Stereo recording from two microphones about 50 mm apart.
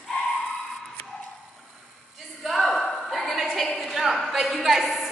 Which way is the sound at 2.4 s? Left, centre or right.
Centre.